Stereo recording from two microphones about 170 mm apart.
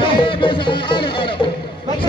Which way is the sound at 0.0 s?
30° left (ahead or behind).